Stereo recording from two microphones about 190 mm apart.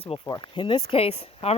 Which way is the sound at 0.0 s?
25° left (ahead or behind).